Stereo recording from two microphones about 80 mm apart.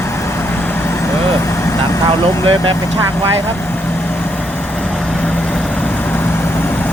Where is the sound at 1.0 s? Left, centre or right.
Left.